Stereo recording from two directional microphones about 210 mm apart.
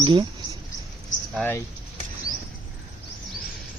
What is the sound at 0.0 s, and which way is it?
Speech, 25° right (ahead or behind).